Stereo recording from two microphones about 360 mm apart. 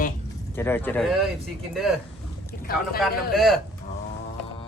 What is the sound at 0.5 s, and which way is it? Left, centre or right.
Speech, centre.